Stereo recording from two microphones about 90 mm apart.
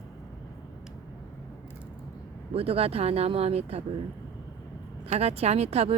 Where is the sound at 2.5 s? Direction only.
90° right.